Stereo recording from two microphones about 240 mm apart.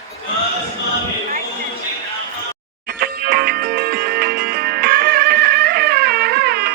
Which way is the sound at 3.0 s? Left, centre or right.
Right.